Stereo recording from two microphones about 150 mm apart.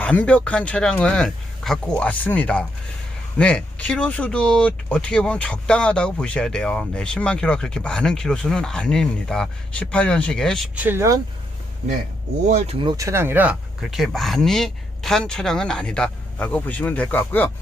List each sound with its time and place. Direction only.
0.0 s speech: 10° left (ahead or behind)
10.8 s speech: 15° right (ahead or behind)
12.8 s speech: 30° right (ahead or behind)
13.1 s speech: 15° right (ahead or behind); by 17.5 s 10° left (ahead or behind)